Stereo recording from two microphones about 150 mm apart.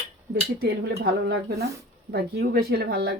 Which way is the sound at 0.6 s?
90° right.